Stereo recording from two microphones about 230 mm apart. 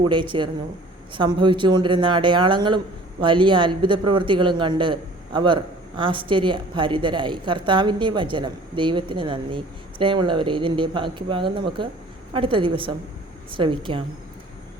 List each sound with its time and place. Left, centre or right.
0.0 s speech: right